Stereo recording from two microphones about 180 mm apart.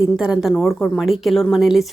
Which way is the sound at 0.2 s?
5° right (ahead or behind).